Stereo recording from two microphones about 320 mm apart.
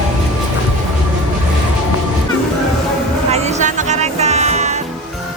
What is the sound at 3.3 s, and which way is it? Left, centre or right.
Music, right.